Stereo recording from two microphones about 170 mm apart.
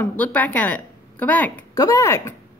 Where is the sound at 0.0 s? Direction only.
10° left (ahead or behind).